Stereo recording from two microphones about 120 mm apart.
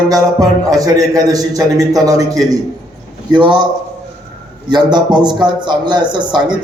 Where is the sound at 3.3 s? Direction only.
40° right (ahead or behind).